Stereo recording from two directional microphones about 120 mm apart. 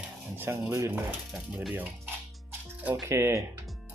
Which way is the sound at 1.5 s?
5° right (ahead or behind).